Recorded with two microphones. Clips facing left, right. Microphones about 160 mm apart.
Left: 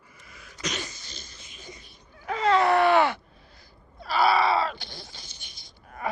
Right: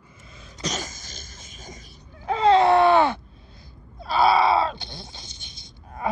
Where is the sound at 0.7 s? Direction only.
45° right (ahead or behind).